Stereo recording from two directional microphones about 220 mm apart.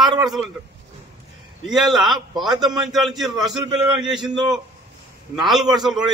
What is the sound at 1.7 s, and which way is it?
A man's voice, centre (ahead or behind).